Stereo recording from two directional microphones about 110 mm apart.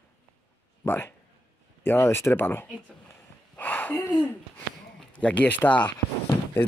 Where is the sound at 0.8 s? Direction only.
20° left (ahead or behind).